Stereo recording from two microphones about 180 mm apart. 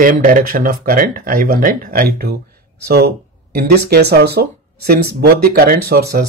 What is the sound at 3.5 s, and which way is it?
Speech, 60° right (ahead or behind).